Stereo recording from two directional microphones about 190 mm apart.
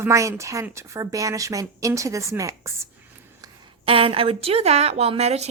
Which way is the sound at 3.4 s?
30° right (ahead or behind).